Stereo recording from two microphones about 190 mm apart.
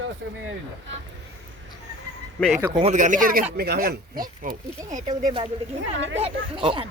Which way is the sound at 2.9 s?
40° right (ahead or behind).